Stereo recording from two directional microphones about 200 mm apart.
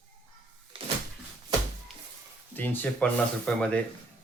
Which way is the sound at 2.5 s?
10° left (ahead or behind).